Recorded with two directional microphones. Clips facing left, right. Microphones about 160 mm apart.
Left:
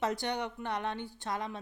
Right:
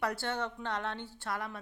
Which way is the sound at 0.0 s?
20° left (ahead or behind).